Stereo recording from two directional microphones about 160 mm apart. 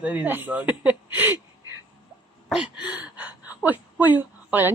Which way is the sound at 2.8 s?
10° right (ahead or behind).